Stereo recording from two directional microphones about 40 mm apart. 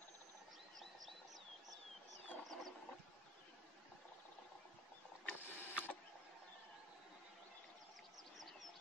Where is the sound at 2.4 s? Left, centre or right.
Centre.